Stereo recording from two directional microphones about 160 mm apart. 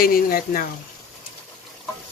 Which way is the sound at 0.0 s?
65° left (ahead or behind).